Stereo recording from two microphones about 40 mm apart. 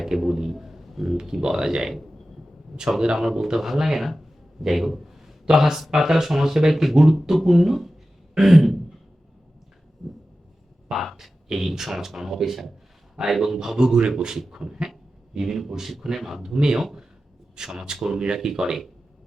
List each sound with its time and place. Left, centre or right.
0.0 s a man's voice: centre
1.1 s speech: centre
3.0 s speech: centre
8.4 s a sound: centre
10.0 s a sound: centre
11.4 s speech: centre
14.5 s beatboxing: centre
15.4 s speech: centre